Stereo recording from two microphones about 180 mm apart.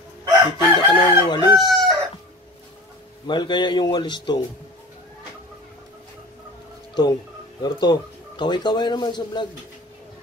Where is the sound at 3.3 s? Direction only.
25° left (ahead or behind).